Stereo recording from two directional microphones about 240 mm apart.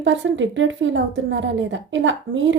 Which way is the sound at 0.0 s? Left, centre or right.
Right.